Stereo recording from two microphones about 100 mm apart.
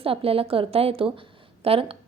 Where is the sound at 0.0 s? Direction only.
70° right (ahead or behind).